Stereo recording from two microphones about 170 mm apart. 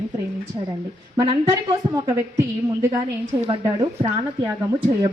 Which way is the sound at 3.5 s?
30° right (ahead or behind).